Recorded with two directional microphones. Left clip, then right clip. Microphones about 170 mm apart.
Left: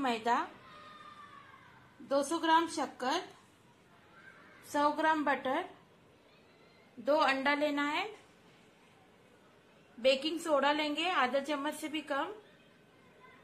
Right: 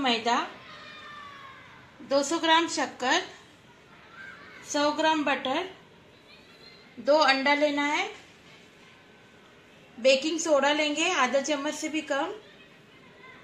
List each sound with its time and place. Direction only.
0.0 s a woman's voice: 5° left (ahead or behind)
2.0 s a woman's voice: 10° left (ahead or behind)
4.7 s a woman's voice: 10° left (ahead or behind)
7.1 s a woman's voice: centre (ahead or behind)
10.0 s a woman's voice: centre (ahead or behind)